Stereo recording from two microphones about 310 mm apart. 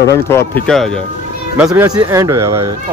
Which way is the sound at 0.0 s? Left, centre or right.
Centre.